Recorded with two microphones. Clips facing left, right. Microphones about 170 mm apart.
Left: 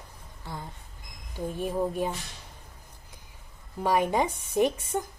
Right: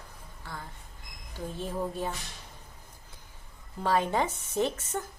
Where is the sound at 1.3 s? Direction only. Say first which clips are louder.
Left 5 dB; 15° left (ahead or behind).